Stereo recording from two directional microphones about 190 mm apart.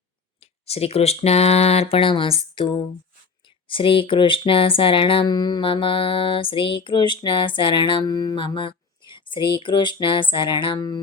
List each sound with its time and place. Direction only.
0.3 s speech: 30° left (ahead or behind)